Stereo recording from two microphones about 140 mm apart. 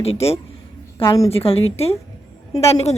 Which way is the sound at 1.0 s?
25° left (ahead or behind).